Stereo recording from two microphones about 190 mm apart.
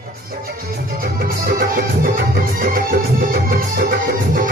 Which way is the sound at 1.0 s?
50° right (ahead or behind).